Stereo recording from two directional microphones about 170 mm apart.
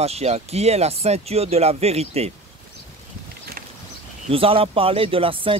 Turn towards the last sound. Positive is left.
turn(degrees=-30)  # may be behind; listen again after turning